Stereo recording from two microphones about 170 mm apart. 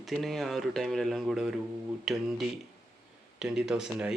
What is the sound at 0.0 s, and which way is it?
Speech, centre (ahead or behind).